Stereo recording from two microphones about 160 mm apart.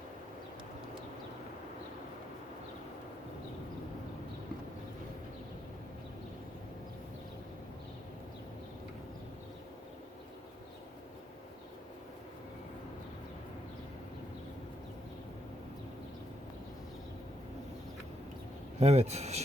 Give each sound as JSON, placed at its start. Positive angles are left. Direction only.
{"t": 18.8, "sound": "speech", "side_deg": -45}